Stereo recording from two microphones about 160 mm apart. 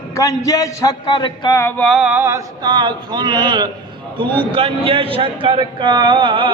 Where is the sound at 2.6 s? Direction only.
25° right (ahead or behind).